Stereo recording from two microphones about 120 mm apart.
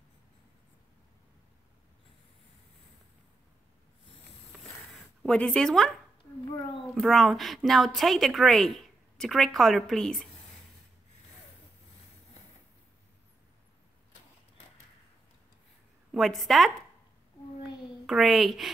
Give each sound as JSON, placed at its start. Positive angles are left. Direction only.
{"t": 4.9, "sound": "a woman's voice", "side_deg": 5}
{"t": 7.0, "sound": "a woman's voice", "side_deg": 0}
{"t": 16.1, "sound": "a woman's voice", "side_deg": 0}
{"t": 17.6, "sound": "a sound", "side_deg": -5}